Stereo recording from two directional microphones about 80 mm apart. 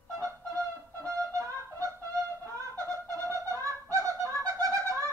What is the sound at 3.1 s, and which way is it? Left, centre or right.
Bird, right.